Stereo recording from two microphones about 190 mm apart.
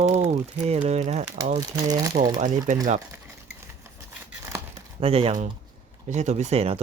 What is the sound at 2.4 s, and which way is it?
Speech, 40° right (ahead or behind).